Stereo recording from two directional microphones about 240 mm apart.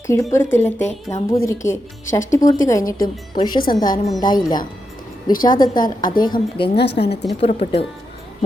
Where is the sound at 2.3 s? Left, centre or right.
Centre.